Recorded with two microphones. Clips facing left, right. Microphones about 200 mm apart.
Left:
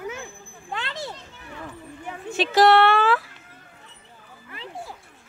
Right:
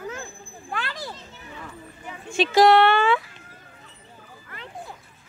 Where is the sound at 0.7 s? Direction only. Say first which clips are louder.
Even; 20° left (ahead or behind).